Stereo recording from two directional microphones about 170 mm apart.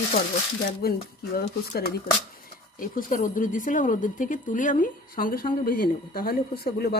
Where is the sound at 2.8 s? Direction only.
50° left (ahead or behind).